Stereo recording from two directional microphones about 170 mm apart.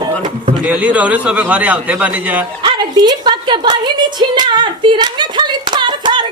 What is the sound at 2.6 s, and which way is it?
A woman's voice, 25° right (ahead or behind).